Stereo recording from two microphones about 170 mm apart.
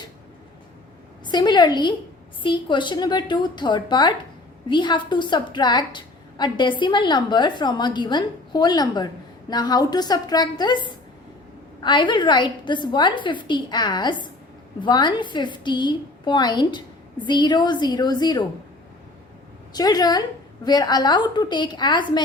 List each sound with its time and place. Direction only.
1.3 s a woman's voice: 25° left (ahead or behind)
19.7 s a woman's voice: 25° left (ahead or behind)